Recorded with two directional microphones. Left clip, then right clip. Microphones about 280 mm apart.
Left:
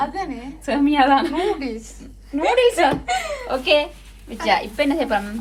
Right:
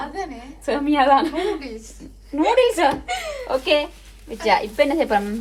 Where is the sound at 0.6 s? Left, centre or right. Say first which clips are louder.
Left 1 dB; right.